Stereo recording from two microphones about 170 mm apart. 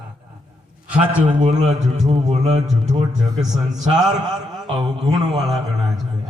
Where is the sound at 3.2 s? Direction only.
20° right (ahead or behind).